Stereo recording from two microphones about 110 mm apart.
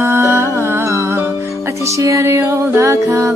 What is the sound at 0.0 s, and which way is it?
Music, 20° right (ahead or behind).